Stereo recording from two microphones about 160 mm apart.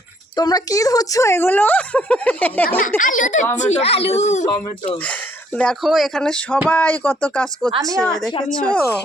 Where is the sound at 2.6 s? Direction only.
65° left (ahead or behind); by 5.0 s 45° left (ahead or behind).